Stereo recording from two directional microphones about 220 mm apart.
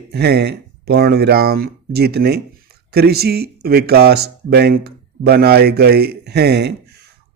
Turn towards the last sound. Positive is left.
turn(degrees=-50)  # may be behind; listen again after turning